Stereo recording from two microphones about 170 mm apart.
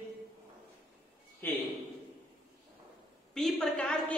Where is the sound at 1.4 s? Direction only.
10° left (ahead or behind).